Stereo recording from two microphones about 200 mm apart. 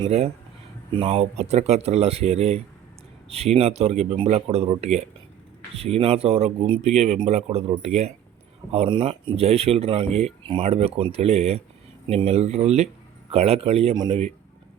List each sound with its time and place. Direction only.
0.0 s speech: 30° right (ahead or behind)